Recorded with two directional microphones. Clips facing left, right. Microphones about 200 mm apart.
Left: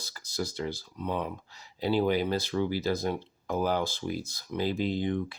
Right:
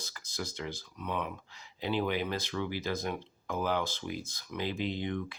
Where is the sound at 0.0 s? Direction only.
35° left (ahead or behind).